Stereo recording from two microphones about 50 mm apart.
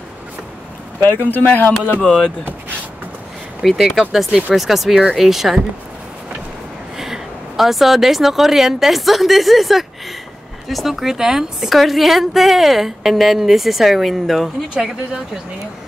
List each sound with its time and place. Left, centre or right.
1.0 s speech: left
2.0 s speech: centre
3.6 s a woman's voice: centre
7.0 s a woman's voice: centre